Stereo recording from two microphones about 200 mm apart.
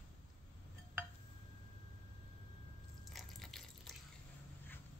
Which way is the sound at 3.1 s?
Centre (ahead or behind).